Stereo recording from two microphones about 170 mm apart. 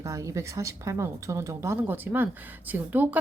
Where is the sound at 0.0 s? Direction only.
20° right (ahead or behind).